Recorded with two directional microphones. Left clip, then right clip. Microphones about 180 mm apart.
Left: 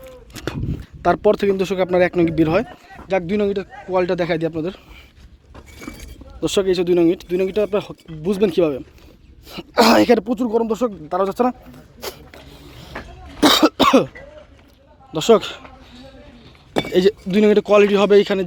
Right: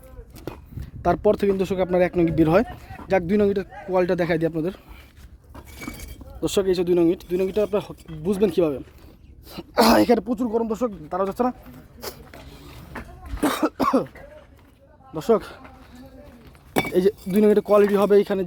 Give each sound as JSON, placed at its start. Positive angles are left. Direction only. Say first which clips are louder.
{"t": 0.4, "sound": "a sound", "louder": "left 8 dB", "side_deg": 20}
{"t": 0.8, "sound": "speech", "louder": "left 4 dB", "side_deg": 0}
{"t": 2.4, "sound": "speech", "louder": "left 1 dB", "side_deg": -25}
{"t": 6.4, "sound": "speech", "louder": "left 3 dB", "side_deg": 0}
{"t": 10.2, "sound": "speech", "louder": "left 5 dB", "side_deg": 25}
{"t": 11.9, "sound": "a sound", "louder": "left 5 dB", "side_deg": 15}
{"t": 13.4, "sound": "cough", "louder": "left 9 dB", "side_deg": 20}
{"t": 15.1, "sound": "a sound", "louder": "left 7 dB", "side_deg": 10}
{"t": 16.9, "sound": "speech", "louder": "left 5 dB", "side_deg": -5}